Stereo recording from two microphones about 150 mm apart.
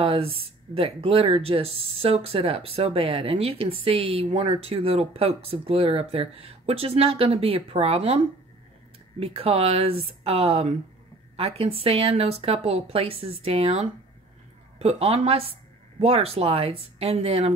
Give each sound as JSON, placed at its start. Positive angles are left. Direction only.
{"t": 0.0, "sound": "speech", "side_deg": -40}
{"t": 9.2, "sound": "a woman's voice", "side_deg": -40}